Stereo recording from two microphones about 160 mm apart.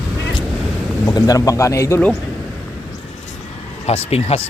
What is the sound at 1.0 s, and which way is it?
Speech, 20° left (ahead or behind).